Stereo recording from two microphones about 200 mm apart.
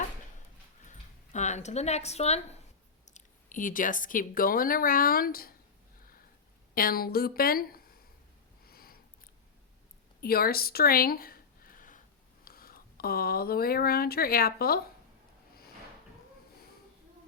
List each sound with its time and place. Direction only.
0.9 s a sound: 35° left (ahead or behind)
3.1 s speech: 40° left (ahead or behind)
6.7 s a woman's voice: 45° left (ahead or behind)
8.6 s sniff: 45° left (ahead or behind)
10.2 s a sound: 50° left (ahead or behind)
12.5 s speech: 45° left (ahead or behind)